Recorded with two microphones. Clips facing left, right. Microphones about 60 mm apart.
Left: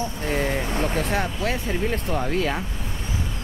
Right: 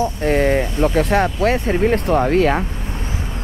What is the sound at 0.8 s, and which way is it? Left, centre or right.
Speech, right.